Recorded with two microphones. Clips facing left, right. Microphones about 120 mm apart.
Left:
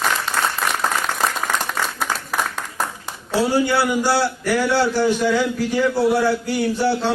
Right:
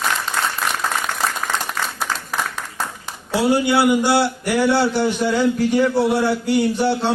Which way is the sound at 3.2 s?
15° right (ahead or behind).